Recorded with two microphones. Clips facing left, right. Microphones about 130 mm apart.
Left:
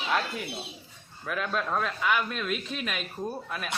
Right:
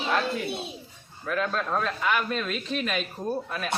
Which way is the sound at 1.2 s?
5° left (ahead or behind).